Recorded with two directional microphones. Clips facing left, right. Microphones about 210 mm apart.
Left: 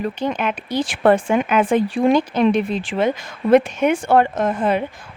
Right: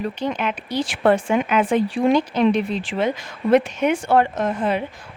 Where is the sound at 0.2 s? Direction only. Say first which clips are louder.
Left 2 dB; 50° left (ahead or behind).